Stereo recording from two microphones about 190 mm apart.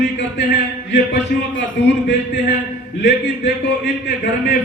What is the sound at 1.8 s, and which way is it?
Speech, 65° left (ahead or behind).